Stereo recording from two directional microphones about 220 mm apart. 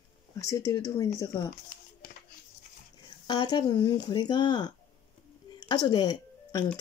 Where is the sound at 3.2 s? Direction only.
20° left (ahead or behind).